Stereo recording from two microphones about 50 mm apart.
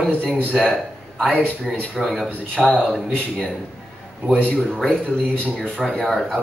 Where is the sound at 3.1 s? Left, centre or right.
Left.